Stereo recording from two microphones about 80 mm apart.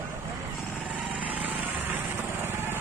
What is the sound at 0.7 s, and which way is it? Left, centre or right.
Vehicle, centre.